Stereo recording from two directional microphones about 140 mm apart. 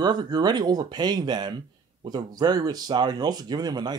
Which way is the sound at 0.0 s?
30° right (ahead or behind).